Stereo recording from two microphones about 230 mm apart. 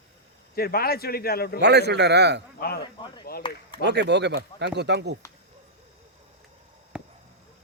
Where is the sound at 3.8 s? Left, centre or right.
Right.